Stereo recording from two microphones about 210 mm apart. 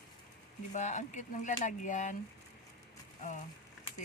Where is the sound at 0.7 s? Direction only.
35° left (ahead or behind).